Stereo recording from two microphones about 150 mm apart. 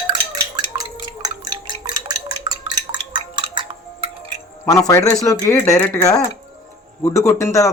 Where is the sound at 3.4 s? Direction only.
30° right (ahead or behind).